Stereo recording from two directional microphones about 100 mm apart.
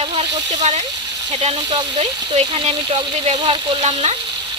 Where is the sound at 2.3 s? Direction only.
70° right (ahead or behind).